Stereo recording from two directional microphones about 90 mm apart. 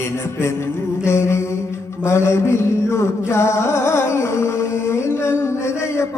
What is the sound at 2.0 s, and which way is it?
Music, 30° left (ahead or behind).